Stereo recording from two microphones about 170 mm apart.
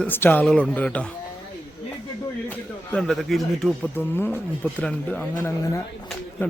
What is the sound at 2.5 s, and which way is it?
Speech, 5° left (ahead or behind).